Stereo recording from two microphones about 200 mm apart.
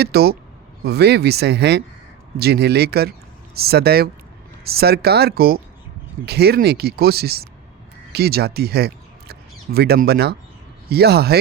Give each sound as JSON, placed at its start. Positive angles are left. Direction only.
{"t": 0.0, "sound": "speech", "side_deg": -50}